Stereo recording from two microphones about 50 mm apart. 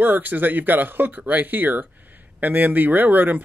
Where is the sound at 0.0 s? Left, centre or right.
Right.